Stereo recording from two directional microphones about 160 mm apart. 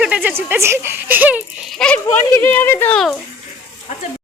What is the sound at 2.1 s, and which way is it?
Speech, 10° left (ahead or behind).